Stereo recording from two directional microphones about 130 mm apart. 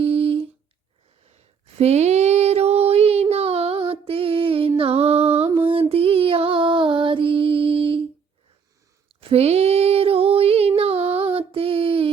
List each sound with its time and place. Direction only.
0.0 s humming: 45° right (ahead or behind)
1.8 s child singing: 55° right (ahead or behind)
4.8 s music: 50° right (ahead or behind)
9.0 s female singing: 50° right (ahead or behind)
11.3 s child singing: 45° right (ahead or behind)